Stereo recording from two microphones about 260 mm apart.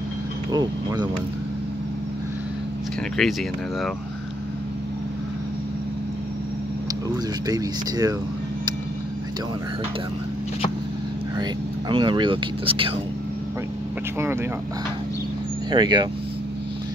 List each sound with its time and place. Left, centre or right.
0.5 s vehicle: centre
3.2 s speech: centre
7.4 s speech: centre
11.9 s speech: centre
15.7 s speech: centre